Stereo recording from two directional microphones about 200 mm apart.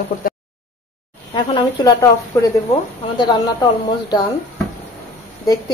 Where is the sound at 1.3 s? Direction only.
20° left (ahead or behind).